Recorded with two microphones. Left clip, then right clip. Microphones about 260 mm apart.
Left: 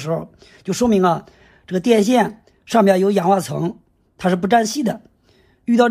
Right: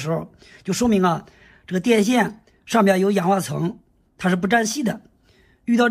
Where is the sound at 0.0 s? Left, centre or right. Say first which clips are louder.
Left 2 dB; centre.